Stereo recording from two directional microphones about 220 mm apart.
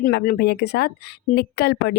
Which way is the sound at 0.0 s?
40° left (ahead or behind).